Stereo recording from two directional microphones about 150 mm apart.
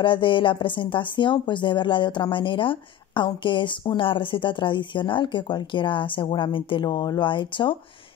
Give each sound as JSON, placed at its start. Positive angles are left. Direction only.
{"t": 0.0, "sound": "a woman's voice", "side_deg": 35}